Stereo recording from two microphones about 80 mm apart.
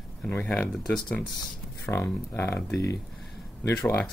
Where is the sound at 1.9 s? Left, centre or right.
Left.